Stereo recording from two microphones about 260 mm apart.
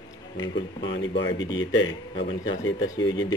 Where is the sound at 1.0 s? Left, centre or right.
Left.